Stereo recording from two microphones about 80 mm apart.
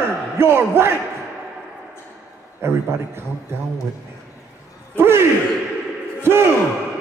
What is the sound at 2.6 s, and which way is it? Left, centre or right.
Speech, right.